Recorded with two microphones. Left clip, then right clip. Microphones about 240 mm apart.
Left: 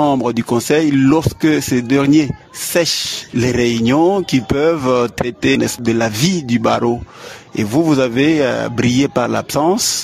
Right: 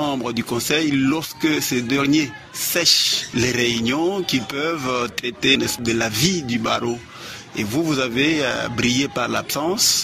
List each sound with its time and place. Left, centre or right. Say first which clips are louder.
0.0 s speech: left 8 dB; left